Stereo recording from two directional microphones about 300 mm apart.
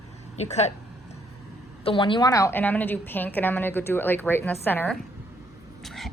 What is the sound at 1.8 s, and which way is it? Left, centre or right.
A woman's voice, centre.